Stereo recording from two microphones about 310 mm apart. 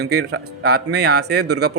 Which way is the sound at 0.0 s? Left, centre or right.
Right.